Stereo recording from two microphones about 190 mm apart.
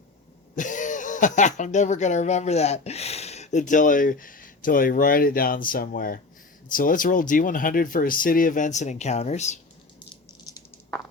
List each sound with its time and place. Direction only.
0.5 s speech: 40° left (ahead or behind)